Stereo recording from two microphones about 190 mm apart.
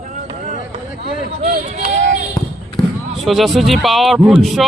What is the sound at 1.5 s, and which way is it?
Speech, 40° right (ahead or behind).